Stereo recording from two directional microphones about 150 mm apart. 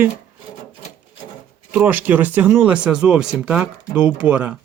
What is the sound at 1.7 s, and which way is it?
Speech, 10° right (ahead or behind).